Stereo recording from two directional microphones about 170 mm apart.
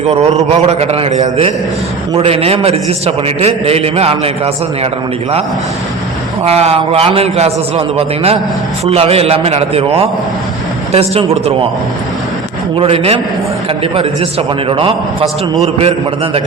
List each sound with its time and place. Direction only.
0.1 s a man's voice: 40° right (ahead or behind)
6.4 s a man's voice: 35° right (ahead or behind)
12.8 s a man's voice: 35° right (ahead or behind)